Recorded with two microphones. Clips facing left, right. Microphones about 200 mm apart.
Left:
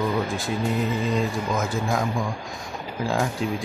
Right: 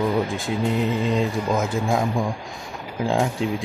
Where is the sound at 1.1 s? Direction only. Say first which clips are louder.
Right 3 dB; 25° right (ahead or behind).